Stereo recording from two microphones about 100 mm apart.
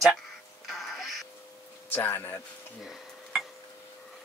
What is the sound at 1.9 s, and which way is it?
Speech, 20° left (ahead or behind).